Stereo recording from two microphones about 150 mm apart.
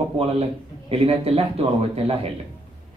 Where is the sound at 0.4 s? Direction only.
40° right (ahead or behind).